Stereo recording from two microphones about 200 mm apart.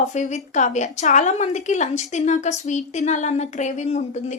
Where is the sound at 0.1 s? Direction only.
35° left (ahead or behind).